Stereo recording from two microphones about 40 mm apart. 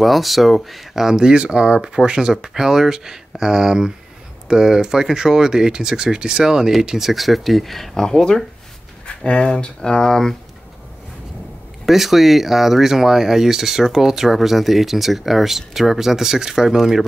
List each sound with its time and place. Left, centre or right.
0.0 s speech: centre
1.1 s speech: right; by 9.7 s left
9.8 s speech: centre
11.8 s speech: centre